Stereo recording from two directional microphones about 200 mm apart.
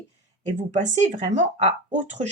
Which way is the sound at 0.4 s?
35° right (ahead or behind).